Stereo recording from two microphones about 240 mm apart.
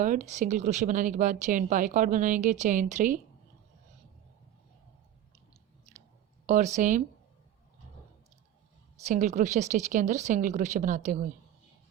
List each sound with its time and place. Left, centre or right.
0.0 s a woman's voice: right
6.4 s speech: right
9.0 s a woman's voice: right